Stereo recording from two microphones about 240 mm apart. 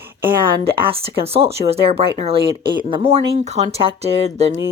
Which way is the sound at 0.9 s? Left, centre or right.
Right.